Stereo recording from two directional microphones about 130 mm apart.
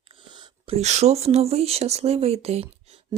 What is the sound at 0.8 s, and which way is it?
Speech, 60° right (ahead or behind).